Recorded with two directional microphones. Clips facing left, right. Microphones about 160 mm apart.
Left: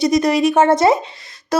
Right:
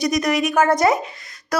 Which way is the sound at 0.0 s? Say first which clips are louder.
Left 5 dB; 30° left (ahead or behind).